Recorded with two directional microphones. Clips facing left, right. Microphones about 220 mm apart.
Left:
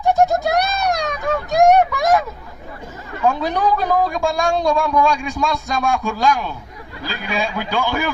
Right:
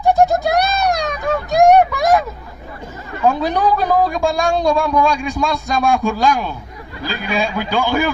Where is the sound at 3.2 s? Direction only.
35° right (ahead or behind).